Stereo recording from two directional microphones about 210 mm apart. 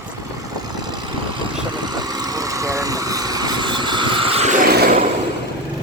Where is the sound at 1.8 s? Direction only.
20° right (ahead or behind); by 5.0 s 45° right (ahead or behind).